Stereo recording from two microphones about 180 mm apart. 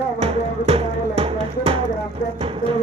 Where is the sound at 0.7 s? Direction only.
35° right (ahead or behind).